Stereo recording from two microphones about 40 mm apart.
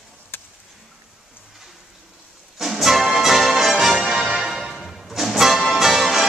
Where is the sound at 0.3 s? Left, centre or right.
Left.